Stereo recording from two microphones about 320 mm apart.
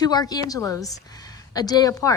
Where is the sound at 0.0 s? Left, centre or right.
Centre.